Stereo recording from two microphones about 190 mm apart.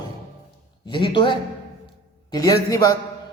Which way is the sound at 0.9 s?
25° left (ahead or behind).